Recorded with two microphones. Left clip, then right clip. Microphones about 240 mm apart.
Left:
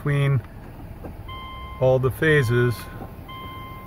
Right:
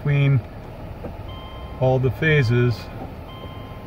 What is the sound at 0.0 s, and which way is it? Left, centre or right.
Speech, centre.